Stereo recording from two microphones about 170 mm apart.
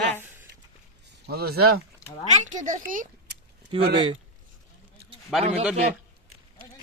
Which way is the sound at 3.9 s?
30° right (ahead or behind).